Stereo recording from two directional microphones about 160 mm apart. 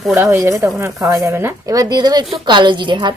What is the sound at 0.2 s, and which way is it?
Speech, 15° right (ahead or behind).